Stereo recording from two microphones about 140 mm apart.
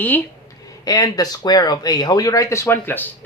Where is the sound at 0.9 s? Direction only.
25° left (ahead or behind).